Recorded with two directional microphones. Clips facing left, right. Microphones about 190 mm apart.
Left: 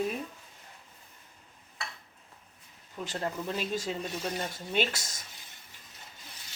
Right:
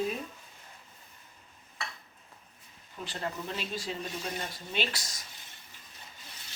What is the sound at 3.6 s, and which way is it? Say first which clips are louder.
Speech: left 4 dB; 45° left (ahead or behind).